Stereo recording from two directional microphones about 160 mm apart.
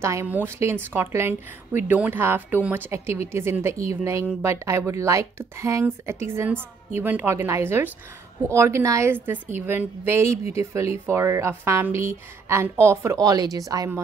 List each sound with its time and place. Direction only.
0.0 s speech: 15° right (ahead or behind)